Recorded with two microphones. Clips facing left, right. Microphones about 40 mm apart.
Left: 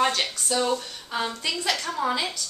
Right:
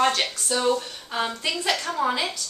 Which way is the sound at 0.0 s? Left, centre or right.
Centre.